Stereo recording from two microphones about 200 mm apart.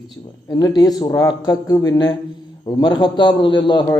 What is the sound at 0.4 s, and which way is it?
A man's voice, 20° left (ahead or behind).